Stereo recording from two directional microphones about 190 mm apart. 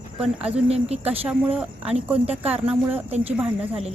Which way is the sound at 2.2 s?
30° right (ahead or behind).